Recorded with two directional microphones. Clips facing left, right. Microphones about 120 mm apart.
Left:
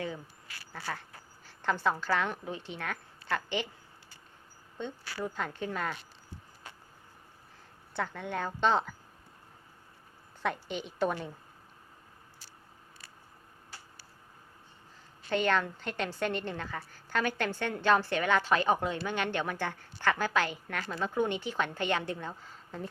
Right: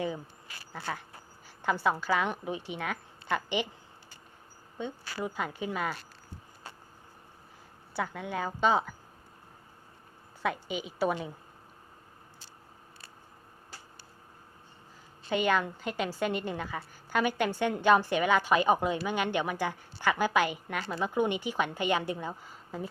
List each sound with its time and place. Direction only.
0.0 s a sound: 20° right (ahead or behind)
1.5 s a woman's voice: 10° right (ahead or behind)
4.8 s a woman's voice: 10° right (ahead or behind)
7.9 s a woman's voice: 5° right (ahead or behind)
10.4 s a woman's voice: 5° right (ahead or behind)
15.3 s a woman's voice: 10° right (ahead or behind)